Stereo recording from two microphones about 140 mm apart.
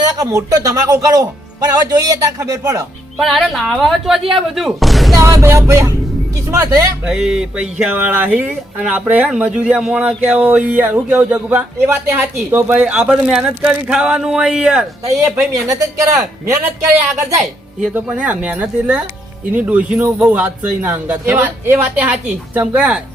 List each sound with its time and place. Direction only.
0.2 s speech: 25° right (ahead or behind)
3.2 s a woman's voice: centre (ahead or behind)
5.1 s speech: 20° right (ahead or behind)
7.1 s speech: 5° right (ahead or behind)
15.0 s speech: 20° right (ahead or behind)
17.9 s speech: 10° right (ahead or behind)